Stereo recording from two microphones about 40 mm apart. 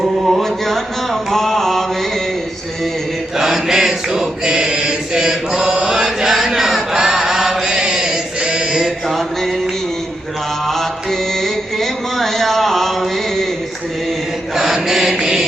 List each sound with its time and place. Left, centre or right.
0.0 s a sound: centre
1.3 s mantra: centre
3.3 s chant: centre
8.7 s chant: centre
11.4 s a sound: centre
14.5 s mantra: centre